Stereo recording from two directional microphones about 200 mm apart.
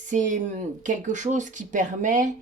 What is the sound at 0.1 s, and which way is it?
Speech, 40° right (ahead or behind).